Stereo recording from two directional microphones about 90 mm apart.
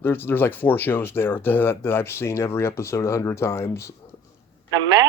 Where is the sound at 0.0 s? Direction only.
25° left (ahead or behind).